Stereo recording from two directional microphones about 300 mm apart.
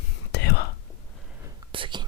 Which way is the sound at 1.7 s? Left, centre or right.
Centre.